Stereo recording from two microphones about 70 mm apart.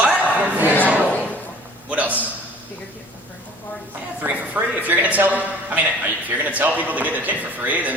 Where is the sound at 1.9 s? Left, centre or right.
Right.